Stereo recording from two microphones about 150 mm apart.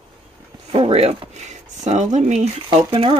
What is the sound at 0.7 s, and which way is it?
Speech, 40° right (ahead or behind).